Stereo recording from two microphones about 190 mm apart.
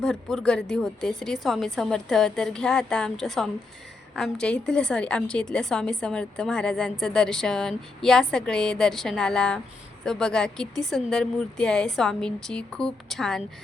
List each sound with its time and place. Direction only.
0.0 s a woman's voice: centre (ahead or behind)